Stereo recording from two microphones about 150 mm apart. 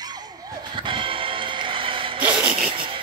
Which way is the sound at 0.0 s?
25° right (ahead or behind).